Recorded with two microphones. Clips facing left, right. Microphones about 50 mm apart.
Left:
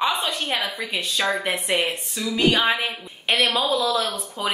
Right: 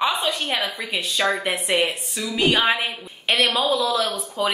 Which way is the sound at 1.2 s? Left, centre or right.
Right.